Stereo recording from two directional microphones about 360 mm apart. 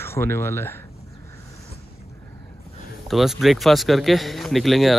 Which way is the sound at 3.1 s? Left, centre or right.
Centre.